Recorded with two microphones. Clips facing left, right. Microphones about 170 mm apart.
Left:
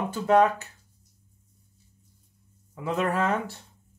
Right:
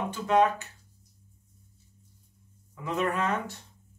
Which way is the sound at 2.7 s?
30° left (ahead or behind).